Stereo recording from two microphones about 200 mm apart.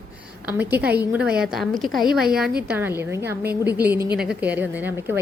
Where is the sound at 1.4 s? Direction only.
Centre (ahead or behind).